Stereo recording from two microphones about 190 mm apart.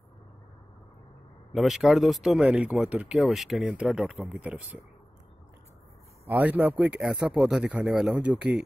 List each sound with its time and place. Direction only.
1.5 s speech: centre (ahead or behind)
6.2 s speech: 10° right (ahead or behind)